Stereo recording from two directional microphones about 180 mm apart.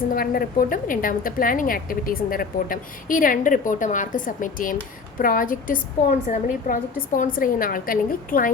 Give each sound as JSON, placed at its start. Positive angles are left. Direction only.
{"t": 0.1, "sound": "a woman's voice", "side_deg": 50}